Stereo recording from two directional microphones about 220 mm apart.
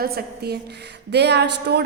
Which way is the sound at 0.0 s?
45° right (ahead or behind).